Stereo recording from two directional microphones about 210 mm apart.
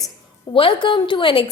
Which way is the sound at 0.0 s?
25° left (ahead or behind).